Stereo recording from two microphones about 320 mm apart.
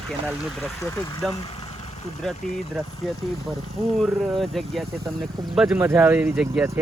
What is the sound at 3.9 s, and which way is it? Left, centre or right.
Speech, centre.